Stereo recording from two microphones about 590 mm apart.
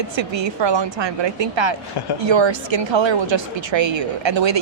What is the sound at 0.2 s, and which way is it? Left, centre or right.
A woman's voice, right.